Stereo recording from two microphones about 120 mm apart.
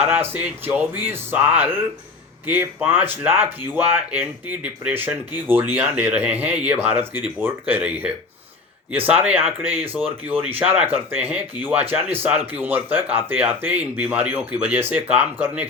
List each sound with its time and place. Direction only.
0.0 s speech: 15° right (ahead or behind)